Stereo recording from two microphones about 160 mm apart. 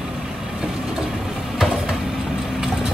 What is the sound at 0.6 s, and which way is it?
Vehicle, 5° right (ahead or behind).